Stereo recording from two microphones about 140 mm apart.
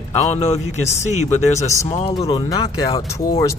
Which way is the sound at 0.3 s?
55° left (ahead or behind).